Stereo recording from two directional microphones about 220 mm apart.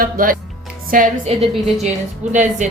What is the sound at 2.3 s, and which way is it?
Speech, 35° right (ahead or behind).